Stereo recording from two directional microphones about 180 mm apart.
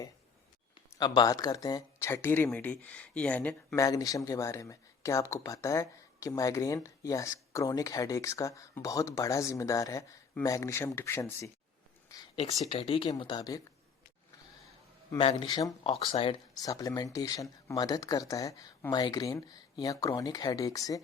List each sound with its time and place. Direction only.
0.9 s speech: 25° left (ahead or behind); by 3.8 s 10° left (ahead or behind)
3.8 s speech: 20° left (ahead or behind)
12.6 s speech: 30° left (ahead or behind)
15.2 s speech: 30° left (ahead or behind)